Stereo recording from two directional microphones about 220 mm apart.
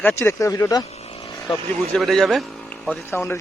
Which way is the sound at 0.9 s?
30° left (ahead or behind).